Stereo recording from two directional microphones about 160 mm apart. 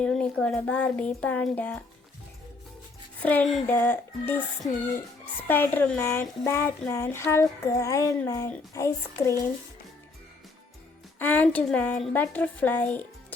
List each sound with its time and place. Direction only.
0.0 s child singing: 5° left (ahead or behind)
3.2 s child singing: 10° left (ahead or behind)
11.2 s child singing: 10° left (ahead or behind)